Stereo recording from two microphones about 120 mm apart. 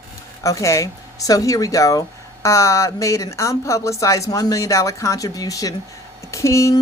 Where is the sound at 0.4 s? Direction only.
25° left (ahead or behind).